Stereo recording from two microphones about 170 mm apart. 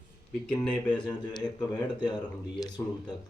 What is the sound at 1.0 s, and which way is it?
Speech, 25° left (ahead or behind).